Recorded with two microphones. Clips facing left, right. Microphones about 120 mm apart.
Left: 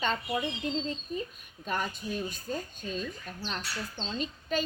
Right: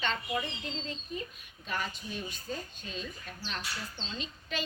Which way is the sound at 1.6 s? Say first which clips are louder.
Left 4 dB; 45° left (ahead or behind).